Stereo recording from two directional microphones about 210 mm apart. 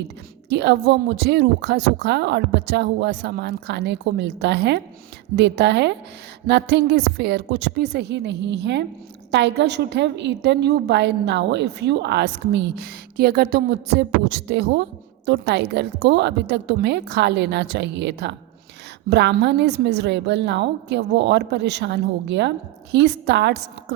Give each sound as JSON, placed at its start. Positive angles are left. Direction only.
{"t": 0.5, "sound": "a woman's voice", "side_deg": -55}